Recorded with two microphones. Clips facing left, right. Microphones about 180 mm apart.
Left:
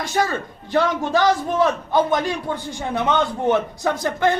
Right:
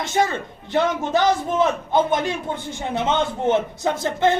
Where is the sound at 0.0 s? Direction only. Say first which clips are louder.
Right 1 dB; 25° right (ahead or behind).